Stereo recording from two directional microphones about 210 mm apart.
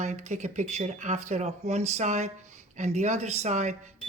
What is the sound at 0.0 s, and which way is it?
Speech, 35° right (ahead or behind).